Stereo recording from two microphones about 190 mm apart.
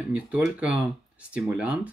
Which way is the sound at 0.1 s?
5° right (ahead or behind).